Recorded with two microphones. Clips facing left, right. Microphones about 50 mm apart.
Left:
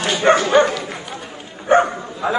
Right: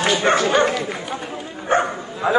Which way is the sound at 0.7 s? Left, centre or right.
Centre.